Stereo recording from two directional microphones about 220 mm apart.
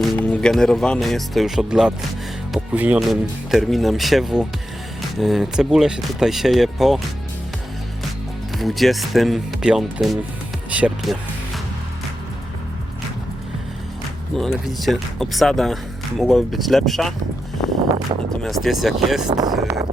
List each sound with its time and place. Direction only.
0.0 s speech: 5° left (ahead or behind)
8.5 s speech: centre (ahead or behind)
10.7 s music: 5° right (ahead or behind)
14.3 s speech: centre (ahead or behind)
18.1 s speech: 30° right (ahead or behind)
18.4 s speech: centre (ahead or behind)
19.3 s speech: 15° right (ahead or behind)